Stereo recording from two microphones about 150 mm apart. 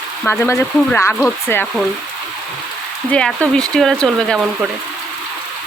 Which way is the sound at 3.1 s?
5° left (ahead or behind).